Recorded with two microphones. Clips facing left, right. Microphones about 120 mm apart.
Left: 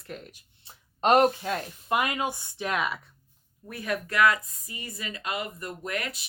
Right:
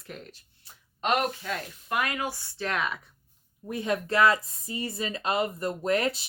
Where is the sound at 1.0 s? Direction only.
35° left (ahead or behind); by 3.0 s 5° left (ahead or behind).